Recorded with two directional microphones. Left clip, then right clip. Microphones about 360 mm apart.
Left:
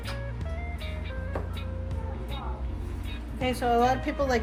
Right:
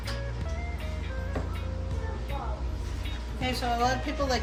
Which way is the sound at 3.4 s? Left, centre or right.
Left.